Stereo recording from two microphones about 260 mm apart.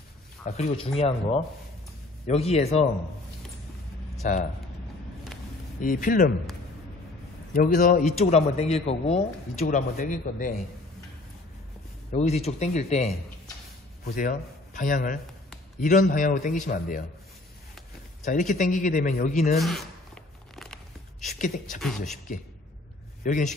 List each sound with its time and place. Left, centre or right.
0.5 s a man's voice: left
4.2 s speech: left
5.8 s speech: left
7.5 s a man's voice: left
12.1 s a man's voice: left
18.2 s a man's voice: left
19.6 s speech: centre
20.5 s a sound: centre
21.7 s speech: centre
23.2 s speech: left